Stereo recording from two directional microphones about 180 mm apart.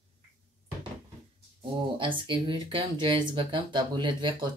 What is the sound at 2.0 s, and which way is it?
Speech, 25° right (ahead or behind).